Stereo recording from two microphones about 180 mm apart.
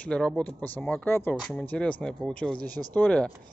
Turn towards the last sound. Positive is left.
turn(degrees=5)  # may be behind; listen again after turning